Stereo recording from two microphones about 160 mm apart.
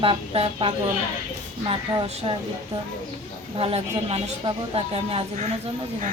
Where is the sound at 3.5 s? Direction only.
35° right (ahead or behind).